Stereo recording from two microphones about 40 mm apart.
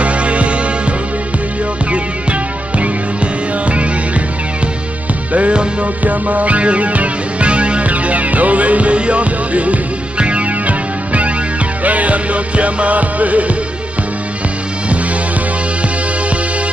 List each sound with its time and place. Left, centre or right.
0.0 s music: right
2.8 s music: right
5.3 s music: right
6.0 s music: right